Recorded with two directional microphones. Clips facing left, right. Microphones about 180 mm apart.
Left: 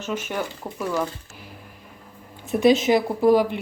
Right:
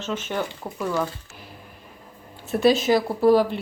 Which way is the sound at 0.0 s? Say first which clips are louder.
Even; 10° left (ahead or behind).